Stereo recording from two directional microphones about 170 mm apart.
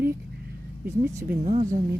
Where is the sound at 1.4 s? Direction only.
40° right (ahead or behind).